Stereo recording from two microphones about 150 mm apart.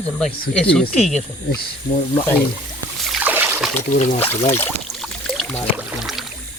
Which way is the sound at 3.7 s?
50° left (ahead or behind).